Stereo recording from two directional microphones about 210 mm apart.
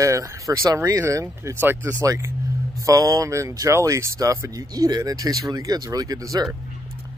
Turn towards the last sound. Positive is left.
turn(degrees=-15)  # may be behind; listen again after turning